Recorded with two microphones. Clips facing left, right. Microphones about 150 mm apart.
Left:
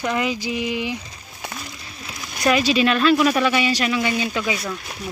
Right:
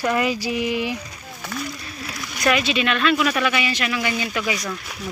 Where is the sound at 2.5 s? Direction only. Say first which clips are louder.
Left 3 dB; 35° left (ahead or behind).